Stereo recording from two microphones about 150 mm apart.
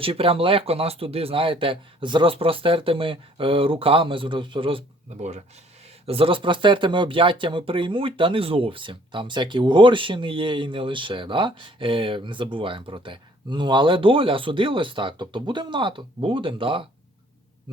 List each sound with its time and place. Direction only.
0.0 s speech: 40° right (ahead or behind)
6.1 s speech: 40° right (ahead or behind)